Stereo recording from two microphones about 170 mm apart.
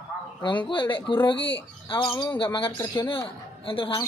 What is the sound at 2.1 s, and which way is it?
Speech, 15° left (ahead or behind).